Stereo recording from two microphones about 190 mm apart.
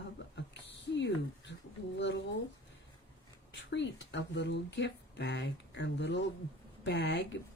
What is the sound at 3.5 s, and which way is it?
Speech, 70° left (ahead or behind).